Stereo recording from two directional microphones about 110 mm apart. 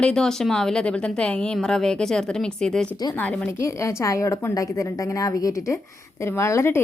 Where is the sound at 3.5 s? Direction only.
25° left (ahead or behind).